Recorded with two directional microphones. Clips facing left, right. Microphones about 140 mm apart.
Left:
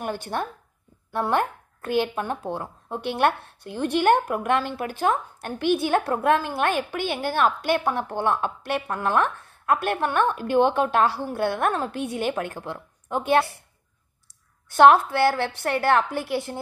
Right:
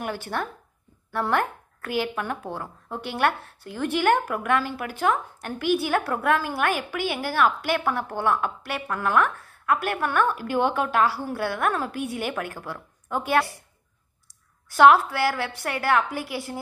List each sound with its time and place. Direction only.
0.1 s a woman's voice: 20° left (ahead or behind)
14.7 s a woman's voice: 25° left (ahead or behind)